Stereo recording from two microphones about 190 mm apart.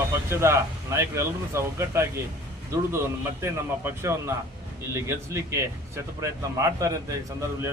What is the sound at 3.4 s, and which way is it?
Speech, 15° right (ahead or behind).